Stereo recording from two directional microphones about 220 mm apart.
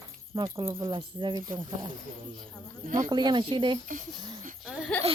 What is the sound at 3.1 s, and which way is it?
Speech, 20° right (ahead or behind).